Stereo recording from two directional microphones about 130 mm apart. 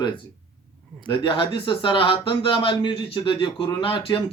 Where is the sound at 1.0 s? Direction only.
40° left (ahead or behind).